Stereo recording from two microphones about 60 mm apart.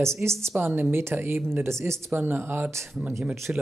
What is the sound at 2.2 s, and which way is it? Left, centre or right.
Speech, right.